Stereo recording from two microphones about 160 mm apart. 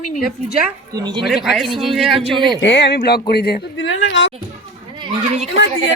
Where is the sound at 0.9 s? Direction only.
25° right (ahead or behind).